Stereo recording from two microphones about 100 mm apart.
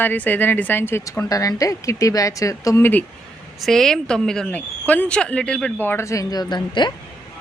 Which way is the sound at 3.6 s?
5° left (ahead or behind).